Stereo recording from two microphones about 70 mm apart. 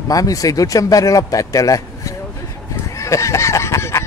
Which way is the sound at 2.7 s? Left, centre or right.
Left.